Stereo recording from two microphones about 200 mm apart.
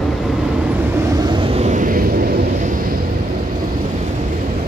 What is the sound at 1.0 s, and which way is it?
Vehicle, 15° right (ahead or behind).